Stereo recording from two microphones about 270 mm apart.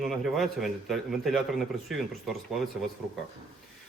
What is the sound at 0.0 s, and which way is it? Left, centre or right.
A man's voice, centre.